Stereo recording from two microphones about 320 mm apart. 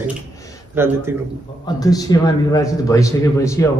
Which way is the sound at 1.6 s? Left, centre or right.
Centre.